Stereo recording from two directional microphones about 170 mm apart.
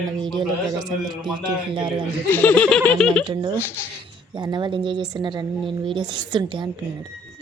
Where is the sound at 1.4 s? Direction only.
30° right (ahead or behind).